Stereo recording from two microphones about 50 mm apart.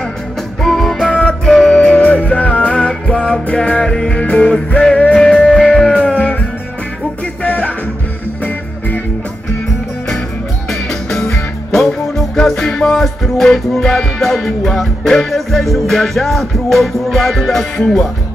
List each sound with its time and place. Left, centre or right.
0.6 s music: centre
0.9 s music: left
1.4 s music: centre
1.8 s music: left
7.4 s music: left
10.7 s music: centre